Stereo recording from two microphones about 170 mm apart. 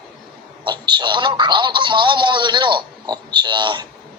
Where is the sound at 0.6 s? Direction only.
25° right (ahead or behind).